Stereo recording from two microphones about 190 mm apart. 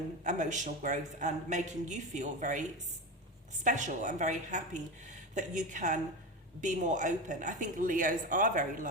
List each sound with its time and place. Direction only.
0.3 s a woman's voice: 40° right (ahead or behind)